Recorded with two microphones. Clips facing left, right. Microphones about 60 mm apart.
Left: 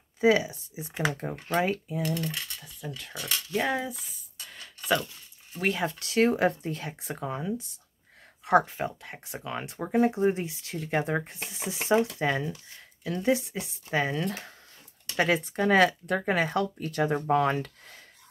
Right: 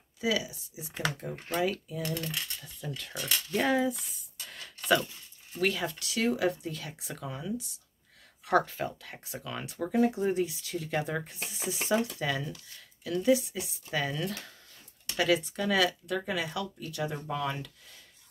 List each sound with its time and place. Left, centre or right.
0.2 s speech: left
3.0 s cutlery: centre
3.5 s speech: centre
5.6 s speech: left